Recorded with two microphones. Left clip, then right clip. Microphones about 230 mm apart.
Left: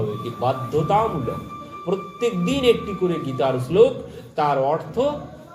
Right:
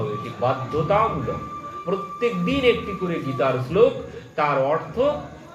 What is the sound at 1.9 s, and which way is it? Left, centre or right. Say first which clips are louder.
A man's voice: left 1 dB; left.